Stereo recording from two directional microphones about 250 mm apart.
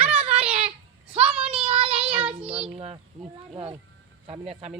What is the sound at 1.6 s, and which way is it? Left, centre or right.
Child singing, right.